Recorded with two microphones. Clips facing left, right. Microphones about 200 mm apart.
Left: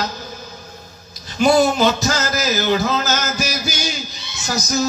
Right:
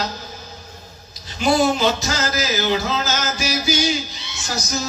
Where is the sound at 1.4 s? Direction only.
45° left (ahead or behind).